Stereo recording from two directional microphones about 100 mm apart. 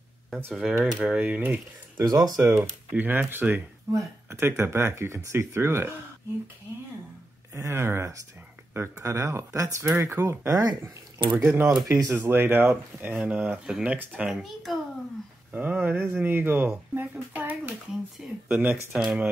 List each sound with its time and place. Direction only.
0.5 s a child's voice: 5° right (ahead or behind)
2.0 s speech: 40° right (ahead or behind)
2.9 s speech: 20° right (ahead or behind)
7.5 s speech: 30° right (ahead or behind)
11.2 s speech: 15° right (ahead or behind)
14.3 s a child's voice: centre (ahead or behind)
15.5 s speech: 15° right (ahead or behind)